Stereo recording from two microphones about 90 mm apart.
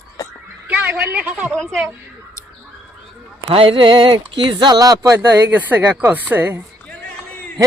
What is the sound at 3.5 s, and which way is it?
A man's voice, 90° right.